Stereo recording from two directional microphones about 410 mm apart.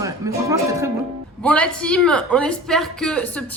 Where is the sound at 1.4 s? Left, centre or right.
Centre.